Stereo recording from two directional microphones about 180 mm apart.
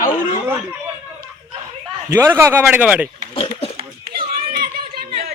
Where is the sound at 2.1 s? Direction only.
15° right (ahead or behind).